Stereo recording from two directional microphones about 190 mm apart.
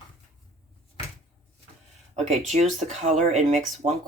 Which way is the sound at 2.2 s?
35° right (ahead or behind).